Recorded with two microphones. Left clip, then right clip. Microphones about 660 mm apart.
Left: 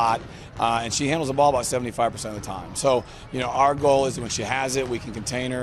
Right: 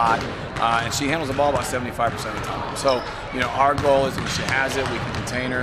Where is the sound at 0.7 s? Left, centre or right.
Left.